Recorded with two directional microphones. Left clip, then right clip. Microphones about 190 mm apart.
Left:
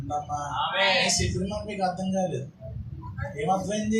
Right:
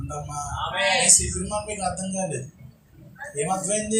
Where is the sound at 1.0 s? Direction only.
30° right (ahead or behind).